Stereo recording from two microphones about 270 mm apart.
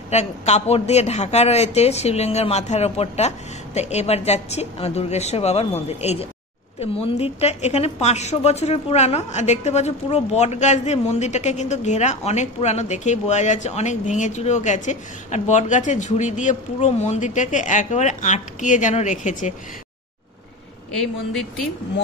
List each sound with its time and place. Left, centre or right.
0.1 s a woman's voice: left